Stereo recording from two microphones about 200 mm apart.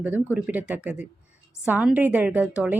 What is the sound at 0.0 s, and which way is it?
A woman's voice, 10° right (ahead or behind).